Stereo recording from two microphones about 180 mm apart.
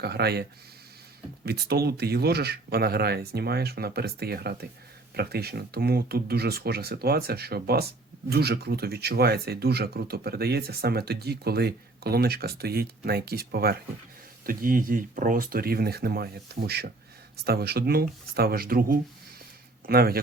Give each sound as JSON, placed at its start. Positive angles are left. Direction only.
{"t": 0.0, "sound": "speech", "side_deg": -65}
{"t": 1.5, "sound": "speech", "side_deg": -60}